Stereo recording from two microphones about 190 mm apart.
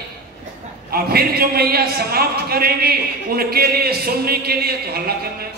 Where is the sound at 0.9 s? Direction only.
55° right (ahead or behind).